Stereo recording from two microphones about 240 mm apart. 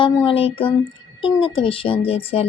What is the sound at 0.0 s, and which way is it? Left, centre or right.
Speech, left.